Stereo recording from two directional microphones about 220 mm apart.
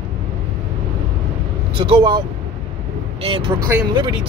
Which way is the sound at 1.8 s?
20° right (ahead or behind).